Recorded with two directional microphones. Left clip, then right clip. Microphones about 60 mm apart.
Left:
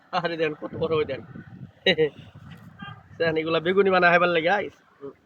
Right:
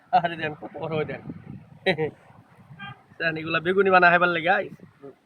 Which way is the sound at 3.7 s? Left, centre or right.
Right.